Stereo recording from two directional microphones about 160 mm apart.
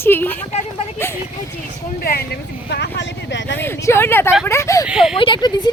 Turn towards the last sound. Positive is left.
turn(degrees=30)  # may be behind; listen again after turning